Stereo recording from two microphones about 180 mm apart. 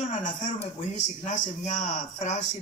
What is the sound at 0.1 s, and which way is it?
A man's voice, 45° left (ahead or behind).